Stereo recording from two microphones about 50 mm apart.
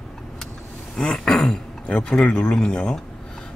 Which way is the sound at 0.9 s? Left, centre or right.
Centre.